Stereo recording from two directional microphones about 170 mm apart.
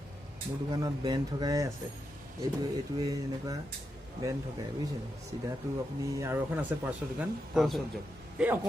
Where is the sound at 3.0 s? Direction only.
20° right (ahead or behind).